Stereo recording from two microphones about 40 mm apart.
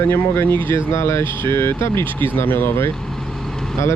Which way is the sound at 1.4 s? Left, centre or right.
Left.